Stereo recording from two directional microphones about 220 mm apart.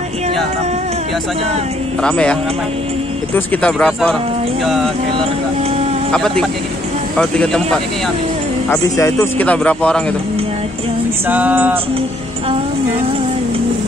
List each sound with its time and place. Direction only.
2.0 s a man's voice: 5° left (ahead or behind)
3.3 s a man's voice: 5° left (ahead or behind)
6.1 s a man's voice: 5° left (ahead or behind)
11.2 s music: 10° right (ahead or behind)